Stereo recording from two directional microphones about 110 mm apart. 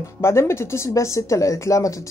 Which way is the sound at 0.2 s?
25° left (ahead or behind).